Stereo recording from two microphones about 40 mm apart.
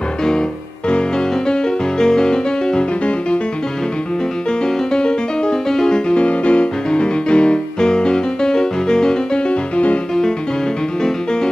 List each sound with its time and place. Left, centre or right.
1.5 s music: centre
4.9 s music: centre
6.0 s music: left
9.5 s music: left